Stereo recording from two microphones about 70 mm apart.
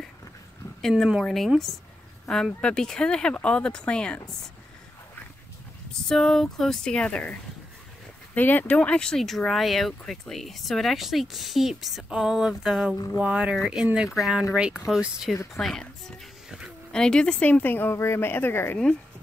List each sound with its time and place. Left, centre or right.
0.8 s speech: centre
6.0 s speech: centre
8.4 s a woman's voice: left
8.7 s speech: centre
12.1 s a sound: centre
12.9 s speech: left
13.2 s a sound: centre
14.1 s speech: centre
15.0 s a sound: centre
15.5 s speech: centre
16.4 s a sound: centre
16.9 s a woman's voice: centre; by 18.8 s left